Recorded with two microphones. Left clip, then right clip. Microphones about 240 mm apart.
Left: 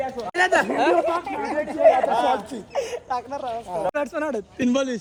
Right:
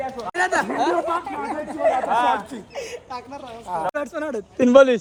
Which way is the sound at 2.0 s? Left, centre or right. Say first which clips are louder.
Right 1 dB; centre.